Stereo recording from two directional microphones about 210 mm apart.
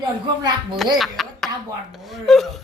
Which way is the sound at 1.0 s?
Centre (ahead or behind).